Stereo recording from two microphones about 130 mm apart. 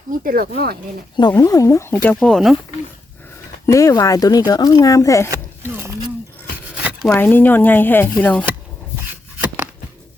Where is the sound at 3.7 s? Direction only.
25° left (ahead or behind).